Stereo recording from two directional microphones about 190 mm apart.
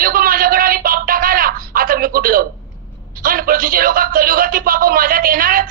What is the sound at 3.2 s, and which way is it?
A man's voice, 50° right (ahead or behind).